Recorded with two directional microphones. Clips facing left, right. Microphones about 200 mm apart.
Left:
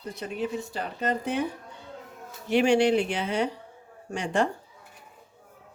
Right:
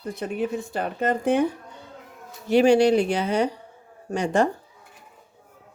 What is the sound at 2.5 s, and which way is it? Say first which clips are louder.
Speech: right 4 dB; 40° right (ahead or behind).